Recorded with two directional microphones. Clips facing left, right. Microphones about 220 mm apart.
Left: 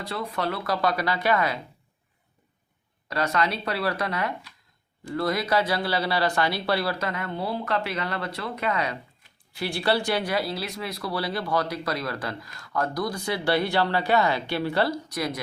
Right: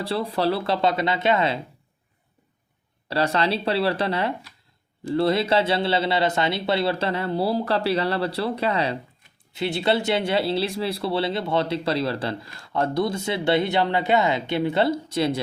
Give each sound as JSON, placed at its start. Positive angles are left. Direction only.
{"t": 0.0, "sound": "speech", "side_deg": -30}
{"t": 3.1, "sound": "speech", "side_deg": -30}